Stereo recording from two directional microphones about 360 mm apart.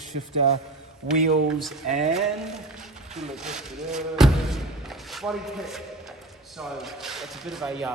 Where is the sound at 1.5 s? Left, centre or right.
Centre.